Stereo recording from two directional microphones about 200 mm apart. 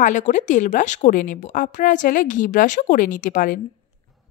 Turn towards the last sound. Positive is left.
turn(degrees=40)  # may be behind; listen again after turning